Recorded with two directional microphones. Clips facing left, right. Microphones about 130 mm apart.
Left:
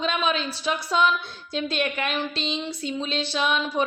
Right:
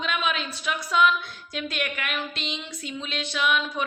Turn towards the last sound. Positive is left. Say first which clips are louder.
# left 2 dB
turn(degrees=30)  # may be behind; listen again after turning